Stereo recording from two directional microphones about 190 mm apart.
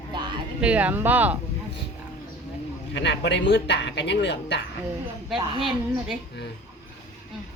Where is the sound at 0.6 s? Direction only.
5° right (ahead or behind).